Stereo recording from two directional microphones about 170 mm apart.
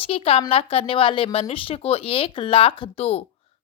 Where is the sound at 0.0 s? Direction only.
35° left (ahead or behind).